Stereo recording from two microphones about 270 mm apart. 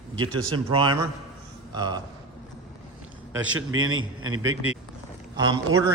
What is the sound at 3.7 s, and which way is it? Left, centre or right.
A man's voice, right.